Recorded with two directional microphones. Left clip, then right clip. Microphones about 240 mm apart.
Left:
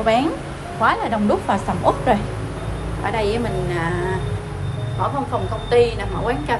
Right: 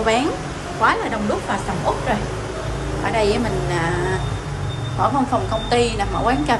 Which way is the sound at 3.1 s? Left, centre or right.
Centre.